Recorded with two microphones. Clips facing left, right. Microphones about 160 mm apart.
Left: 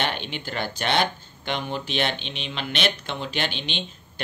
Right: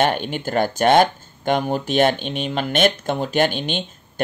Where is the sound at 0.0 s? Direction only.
45° right (ahead or behind).